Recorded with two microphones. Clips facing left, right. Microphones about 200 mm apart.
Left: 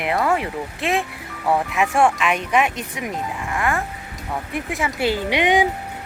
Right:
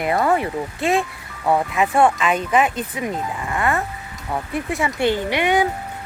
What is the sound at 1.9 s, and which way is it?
Speech, centre (ahead or behind).